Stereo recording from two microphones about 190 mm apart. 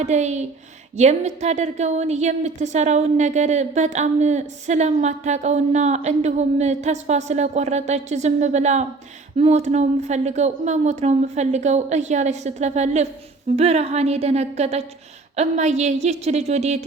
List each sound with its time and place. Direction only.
0.0 s a woman's voice: 35° right (ahead or behind)